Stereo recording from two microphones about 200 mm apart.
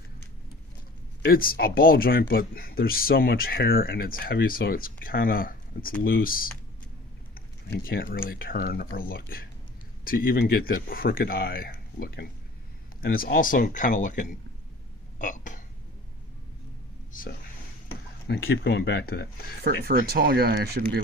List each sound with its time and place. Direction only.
1.3 s speech: 45° left (ahead or behind)
7.3 s a sound: 50° left (ahead or behind)
8.1 s speech: 45° left (ahead or behind)
17.1 s speech: 45° left (ahead or behind)
18.3 s speech: 60° left (ahead or behind)
19.6 s speech: 50° right (ahead or behind)